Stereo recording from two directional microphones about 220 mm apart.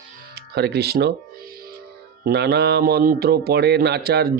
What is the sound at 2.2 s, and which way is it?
Speech, 50° right (ahead or behind).